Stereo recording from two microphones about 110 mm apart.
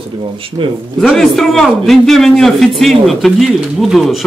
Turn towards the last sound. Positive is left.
turn(degrees=0)  # may be behind; listen again after turning